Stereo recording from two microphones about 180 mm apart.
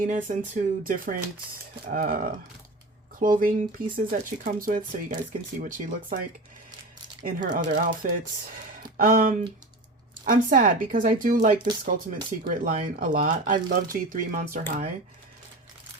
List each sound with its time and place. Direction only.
0.0 s speech: 50° right (ahead or behind)
7.3 s speech: 45° right (ahead or behind)